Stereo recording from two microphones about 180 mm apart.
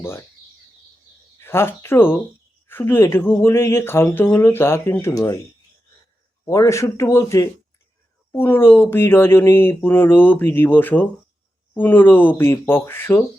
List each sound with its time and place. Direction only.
0.0 s speech: 15° left (ahead or behind)
1.4 s speech: 15° left (ahead or behind)
6.4 s speech: 15° left (ahead or behind)